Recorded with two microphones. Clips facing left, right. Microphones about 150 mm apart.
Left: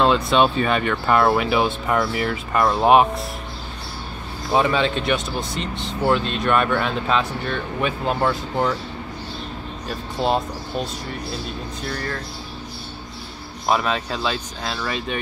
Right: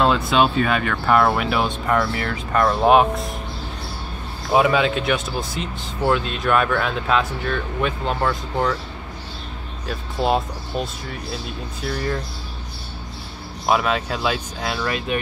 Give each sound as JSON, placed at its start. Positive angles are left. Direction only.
{"t": 0.0, "sound": "speech", "side_deg": 0}
{"t": 4.5, "sound": "speech", "side_deg": -5}
{"t": 9.8, "sound": "speech", "side_deg": 0}
{"t": 13.7, "sound": "speech", "side_deg": -5}